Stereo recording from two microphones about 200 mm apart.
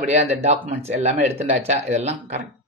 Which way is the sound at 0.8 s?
30° right (ahead or behind).